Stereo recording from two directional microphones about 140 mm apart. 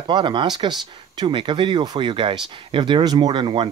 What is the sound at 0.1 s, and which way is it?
Speech, 35° right (ahead or behind).